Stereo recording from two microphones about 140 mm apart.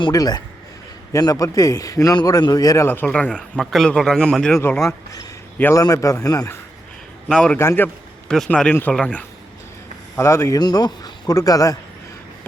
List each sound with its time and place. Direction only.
0.0 s a man's voice: 30° left (ahead or behind); by 4.5 s 5° left (ahead or behind)
4.5 s a man's voice: 15° left (ahead or behind)
7.3 s speech: 5° left (ahead or behind)
7.6 s a man's voice: 20° left (ahead or behind)
8.3 s speech: 5° left (ahead or behind)
10.2 s a man's voice: 20° left (ahead or behind)
10.6 s a man's voice: 30° left (ahead or behind)